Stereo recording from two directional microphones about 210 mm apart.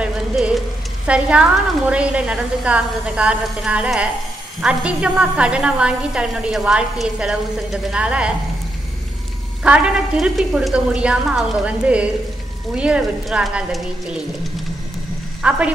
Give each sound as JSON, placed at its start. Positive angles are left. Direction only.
{"t": 0.0, "sound": "a sound", "side_deg": -5}
{"t": 1.0, "sound": "a woman's voice", "side_deg": -5}
{"t": 9.6, "sound": "a woman's voice", "side_deg": -5}
{"t": 15.4, "sound": "a woman's voice", "side_deg": -5}